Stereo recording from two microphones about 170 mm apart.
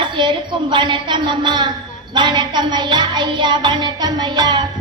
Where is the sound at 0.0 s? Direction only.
30° right (ahead or behind).